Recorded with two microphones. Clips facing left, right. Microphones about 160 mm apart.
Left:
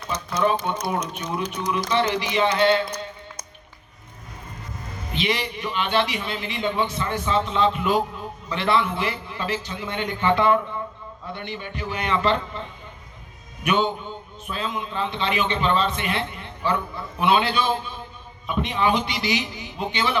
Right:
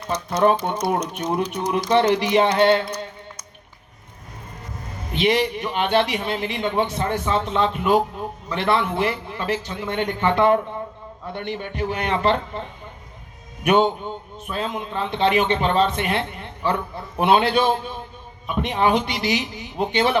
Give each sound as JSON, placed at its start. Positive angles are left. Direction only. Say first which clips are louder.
{"t": 0.1, "sound": "a man's voice", "louder": "right 4 dB", "side_deg": -60}
{"t": 5.2, "sound": "a man's voice", "louder": "right 7 dB", "side_deg": -60}
{"t": 13.7, "sound": "a man's voice", "louder": "right 5 dB", "side_deg": -60}